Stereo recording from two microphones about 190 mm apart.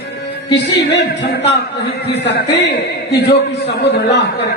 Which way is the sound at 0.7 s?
60° left (ahead or behind).